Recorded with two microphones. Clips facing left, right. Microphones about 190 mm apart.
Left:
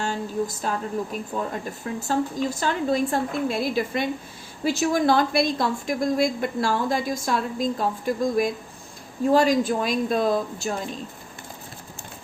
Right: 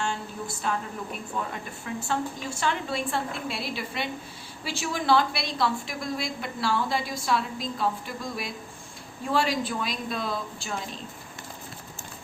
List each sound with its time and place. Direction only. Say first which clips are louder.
0.0 s a woman's voice: left 6 dB; 40° left (ahead or behind)
1.8 s a woman's voice: left 4 dB; 40° left (ahead or behind)